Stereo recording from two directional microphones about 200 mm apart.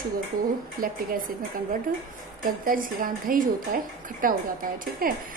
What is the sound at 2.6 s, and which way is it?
A woman's voice, 45° right (ahead or behind).